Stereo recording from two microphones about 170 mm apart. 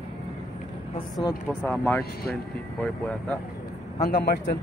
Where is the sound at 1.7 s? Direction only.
10° left (ahead or behind).